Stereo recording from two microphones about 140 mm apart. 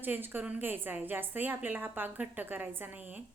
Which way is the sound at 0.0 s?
15° right (ahead or behind).